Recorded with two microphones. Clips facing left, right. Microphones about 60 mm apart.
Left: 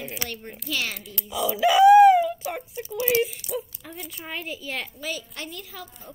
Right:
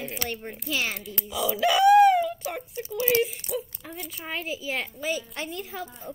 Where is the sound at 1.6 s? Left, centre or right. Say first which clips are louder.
Left 4 dB; centre.